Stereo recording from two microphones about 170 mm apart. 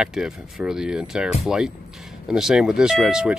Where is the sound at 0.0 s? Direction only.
5° right (ahead or behind).